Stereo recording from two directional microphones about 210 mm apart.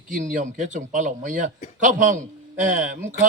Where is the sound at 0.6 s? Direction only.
35° right (ahead or behind).